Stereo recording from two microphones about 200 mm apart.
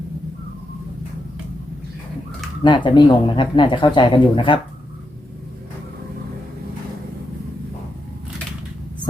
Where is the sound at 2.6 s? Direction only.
25° left (ahead or behind).